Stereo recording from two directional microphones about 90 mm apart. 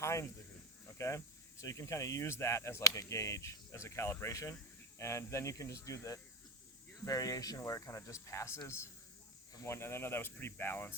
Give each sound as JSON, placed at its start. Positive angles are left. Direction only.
{"t": 0.0, "sound": "snake", "side_deg": 35}
{"t": 0.9, "sound": "a sound", "side_deg": 35}
{"t": 1.6, "sound": "speech", "side_deg": 35}